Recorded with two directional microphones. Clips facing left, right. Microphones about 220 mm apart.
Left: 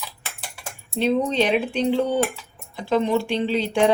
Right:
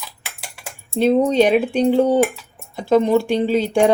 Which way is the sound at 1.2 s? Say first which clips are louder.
Right 6 dB; 45° right (ahead or behind).